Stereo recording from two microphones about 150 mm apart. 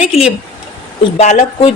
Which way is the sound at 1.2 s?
50° left (ahead or behind).